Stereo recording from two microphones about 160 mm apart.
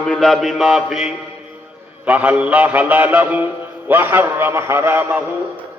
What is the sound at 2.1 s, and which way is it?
A man's voice, 10° right (ahead or behind).